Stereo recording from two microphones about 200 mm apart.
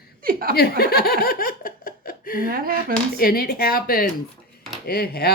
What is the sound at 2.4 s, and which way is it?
Speech, 45° right (ahead or behind).